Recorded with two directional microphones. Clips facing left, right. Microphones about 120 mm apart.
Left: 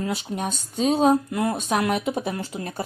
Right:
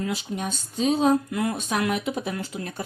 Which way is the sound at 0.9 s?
35° left (ahead or behind).